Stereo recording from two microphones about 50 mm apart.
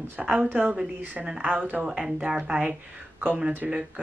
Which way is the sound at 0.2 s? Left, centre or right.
Right.